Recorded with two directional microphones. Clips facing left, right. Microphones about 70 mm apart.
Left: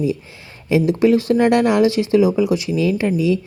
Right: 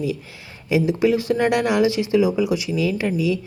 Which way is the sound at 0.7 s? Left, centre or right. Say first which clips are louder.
Left 4 dB; centre.